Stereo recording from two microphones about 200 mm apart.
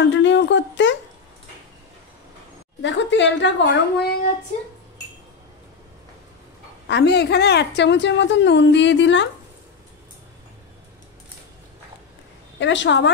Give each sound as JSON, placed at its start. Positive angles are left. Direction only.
{"t": 0.0, "sound": "a sound", "side_deg": 65}
{"t": 2.8, "sound": "a woman's voice", "side_deg": 65}
{"t": 6.9, "sound": "a woman's voice", "side_deg": 60}
{"t": 12.5, "sound": "a woman's voice", "side_deg": 65}